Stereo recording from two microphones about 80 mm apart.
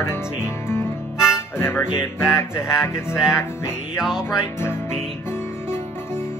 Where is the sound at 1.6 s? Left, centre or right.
Left.